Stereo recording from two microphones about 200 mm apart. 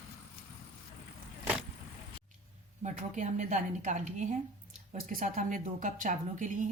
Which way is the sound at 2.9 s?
35° right (ahead or behind).